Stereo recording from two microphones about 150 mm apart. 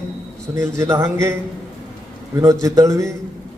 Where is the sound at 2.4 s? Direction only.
20° right (ahead or behind).